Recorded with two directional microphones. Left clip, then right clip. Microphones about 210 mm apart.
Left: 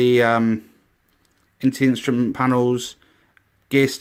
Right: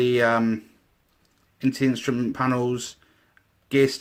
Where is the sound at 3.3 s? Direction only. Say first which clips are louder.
Left 2 dB; 40° left (ahead or behind).